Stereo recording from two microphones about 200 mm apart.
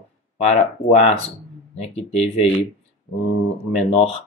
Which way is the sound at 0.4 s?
35° left (ahead or behind).